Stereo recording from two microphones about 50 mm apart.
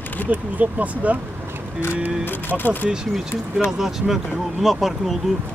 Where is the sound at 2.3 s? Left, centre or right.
Left.